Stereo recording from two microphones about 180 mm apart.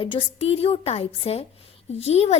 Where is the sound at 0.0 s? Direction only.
30° left (ahead or behind).